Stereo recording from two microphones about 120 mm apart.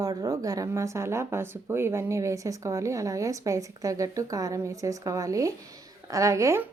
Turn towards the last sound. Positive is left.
turn(degrees=-25)  # may be behind; listen again after turning